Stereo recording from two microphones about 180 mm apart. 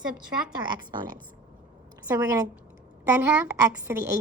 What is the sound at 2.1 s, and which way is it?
A woman's voice, 15° right (ahead or behind).